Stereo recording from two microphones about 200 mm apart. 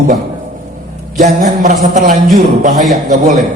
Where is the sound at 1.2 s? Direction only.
40° right (ahead or behind).